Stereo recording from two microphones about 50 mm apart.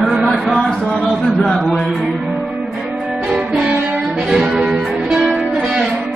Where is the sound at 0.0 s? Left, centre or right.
Centre.